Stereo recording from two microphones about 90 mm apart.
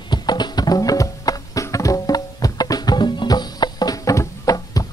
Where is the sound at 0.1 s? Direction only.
50° left (ahead or behind).